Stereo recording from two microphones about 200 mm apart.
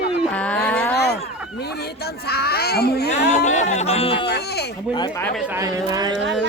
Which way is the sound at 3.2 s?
35° left (ahead or behind).